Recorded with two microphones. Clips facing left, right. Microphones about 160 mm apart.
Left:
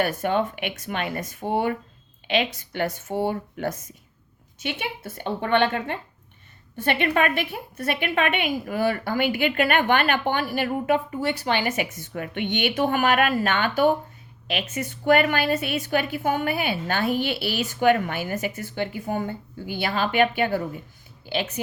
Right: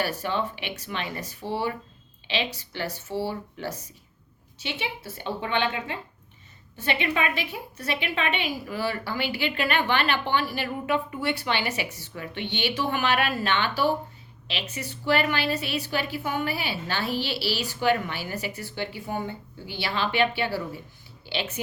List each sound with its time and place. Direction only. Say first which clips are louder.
0.0 s a woman's voice: left 5 dB; 50° left (ahead or behind)